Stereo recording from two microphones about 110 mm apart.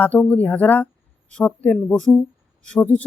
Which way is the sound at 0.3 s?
15° left (ahead or behind).